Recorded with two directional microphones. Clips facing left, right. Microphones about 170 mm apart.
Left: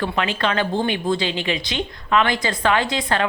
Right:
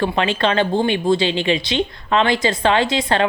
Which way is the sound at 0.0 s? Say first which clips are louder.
Right 4 dB; 25° right (ahead or behind).